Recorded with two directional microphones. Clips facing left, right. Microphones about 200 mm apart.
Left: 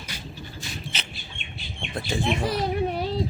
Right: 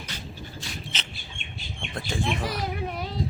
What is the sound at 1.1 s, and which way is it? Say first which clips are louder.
Bird: left 1 dB; 45° right (ahead or behind).